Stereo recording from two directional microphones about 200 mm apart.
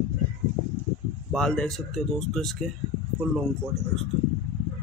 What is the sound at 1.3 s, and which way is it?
Speech, 5° left (ahead or behind).